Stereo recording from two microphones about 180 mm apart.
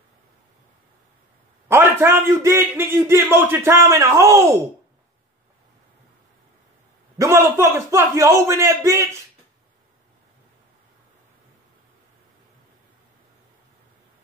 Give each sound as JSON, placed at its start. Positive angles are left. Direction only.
{"t": 1.7, "sound": "a man's voice", "side_deg": -15}
{"t": 7.2, "sound": "a man's voice", "side_deg": -15}